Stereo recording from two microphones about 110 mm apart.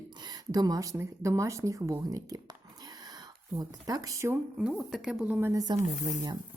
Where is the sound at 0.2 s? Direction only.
35° right (ahead or behind).